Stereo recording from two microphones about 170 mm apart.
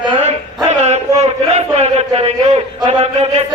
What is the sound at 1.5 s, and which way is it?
A man's voice, 40° right (ahead or behind).